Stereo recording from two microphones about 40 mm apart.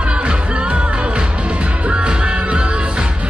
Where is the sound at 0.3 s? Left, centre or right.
Right.